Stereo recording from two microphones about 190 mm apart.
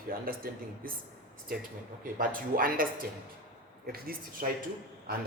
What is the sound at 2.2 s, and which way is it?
Speech, 45° right (ahead or behind).